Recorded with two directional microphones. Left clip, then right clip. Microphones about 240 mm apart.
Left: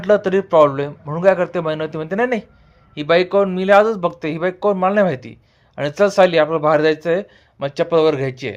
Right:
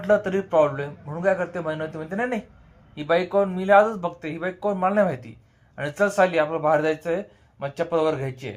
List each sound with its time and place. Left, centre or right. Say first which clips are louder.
0.0 s speech: left 6 dB; left